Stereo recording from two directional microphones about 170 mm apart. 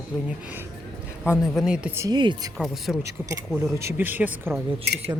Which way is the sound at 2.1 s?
25° right (ahead or behind).